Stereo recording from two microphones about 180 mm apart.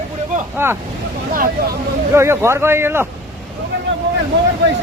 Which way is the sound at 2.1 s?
15° right (ahead or behind).